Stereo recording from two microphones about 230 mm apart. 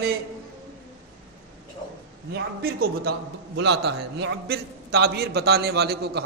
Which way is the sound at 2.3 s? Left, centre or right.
Right.